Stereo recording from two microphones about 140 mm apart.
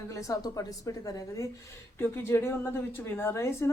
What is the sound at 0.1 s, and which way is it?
A woman's voice, 25° left (ahead or behind).